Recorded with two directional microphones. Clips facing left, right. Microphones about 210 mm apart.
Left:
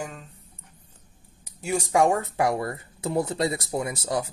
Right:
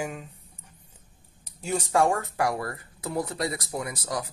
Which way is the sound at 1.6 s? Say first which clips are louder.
Left 2 dB; 10° left (ahead or behind).